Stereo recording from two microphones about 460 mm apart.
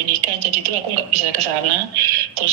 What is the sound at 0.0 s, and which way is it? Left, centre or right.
A woman's voice, right.